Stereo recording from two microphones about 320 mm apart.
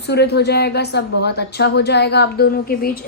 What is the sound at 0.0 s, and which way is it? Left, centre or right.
A woman's voice, left.